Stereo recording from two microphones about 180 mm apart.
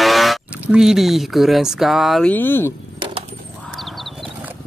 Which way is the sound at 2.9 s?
30° right (ahead or behind).